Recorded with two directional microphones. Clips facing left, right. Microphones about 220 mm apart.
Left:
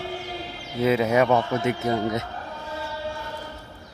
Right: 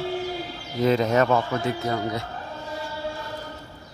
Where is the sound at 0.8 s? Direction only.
5° left (ahead or behind).